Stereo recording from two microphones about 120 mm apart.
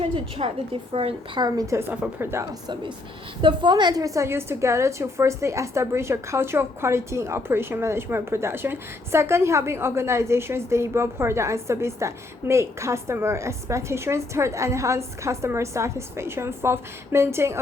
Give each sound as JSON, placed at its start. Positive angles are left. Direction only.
{"t": 0.4, "sound": "a woman's voice", "side_deg": -55}
{"t": 1.4, "sound": "a woman's voice", "side_deg": -30}
{"t": 3.4, "sound": "a woman's voice", "side_deg": -40}